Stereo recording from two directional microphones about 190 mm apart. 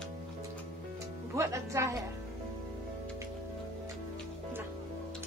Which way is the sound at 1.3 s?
15° right (ahead or behind).